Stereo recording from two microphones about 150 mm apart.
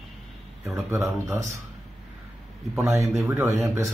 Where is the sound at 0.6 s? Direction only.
20° right (ahead or behind).